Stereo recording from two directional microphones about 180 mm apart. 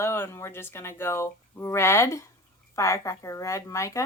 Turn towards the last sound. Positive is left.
turn(degrees=15)  # may be behind; listen again after turning